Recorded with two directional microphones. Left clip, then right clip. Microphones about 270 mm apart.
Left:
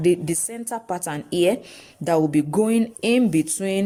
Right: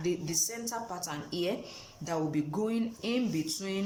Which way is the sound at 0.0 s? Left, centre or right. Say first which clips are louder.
Left 11 dB; left.